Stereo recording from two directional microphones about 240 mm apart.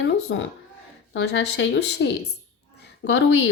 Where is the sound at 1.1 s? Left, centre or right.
Left.